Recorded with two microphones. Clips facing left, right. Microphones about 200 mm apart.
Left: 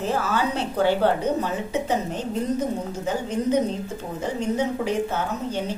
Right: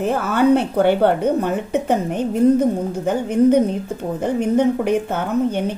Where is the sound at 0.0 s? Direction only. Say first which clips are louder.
Right 7 dB; 55° right (ahead or behind).